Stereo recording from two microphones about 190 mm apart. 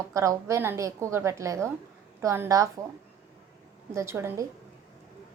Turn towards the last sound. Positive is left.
turn(degrees=-15)  # may be behind; listen again after turning